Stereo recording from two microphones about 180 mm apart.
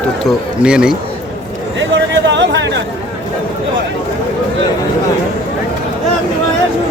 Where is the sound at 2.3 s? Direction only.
85° right.